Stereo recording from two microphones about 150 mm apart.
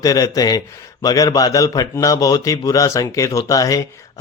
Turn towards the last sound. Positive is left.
turn(degrees=20)  # may be behind; listen again after turning